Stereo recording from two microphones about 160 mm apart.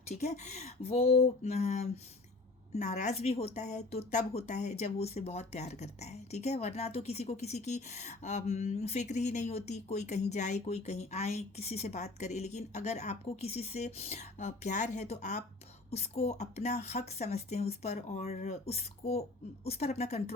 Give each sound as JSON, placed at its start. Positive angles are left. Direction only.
{"t": 0.1, "sound": "speech", "side_deg": 45}